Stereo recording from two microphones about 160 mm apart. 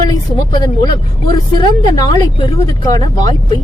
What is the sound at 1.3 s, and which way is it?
Speech, 25° left (ahead or behind).